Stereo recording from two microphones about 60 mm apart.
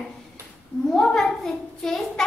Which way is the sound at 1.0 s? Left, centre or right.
Centre.